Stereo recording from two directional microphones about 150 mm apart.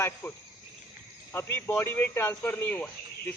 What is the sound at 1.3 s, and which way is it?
A man's voice, 15° left (ahead or behind).